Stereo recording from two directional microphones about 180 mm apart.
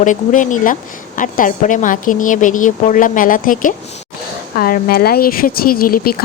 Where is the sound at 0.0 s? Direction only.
45° left (ahead or behind).